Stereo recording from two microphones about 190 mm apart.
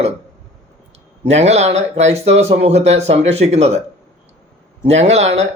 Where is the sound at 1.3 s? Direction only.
35° right (ahead or behind).